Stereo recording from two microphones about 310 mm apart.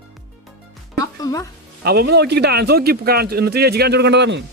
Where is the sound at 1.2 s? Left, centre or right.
Centre.